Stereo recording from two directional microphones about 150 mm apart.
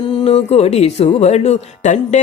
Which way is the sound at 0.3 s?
40° left (ahead or behind).